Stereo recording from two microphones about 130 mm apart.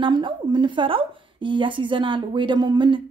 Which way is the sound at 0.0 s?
35° right (ahead or behind).